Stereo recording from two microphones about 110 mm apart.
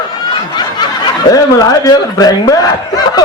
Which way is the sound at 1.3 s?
35° left (ahead or behind).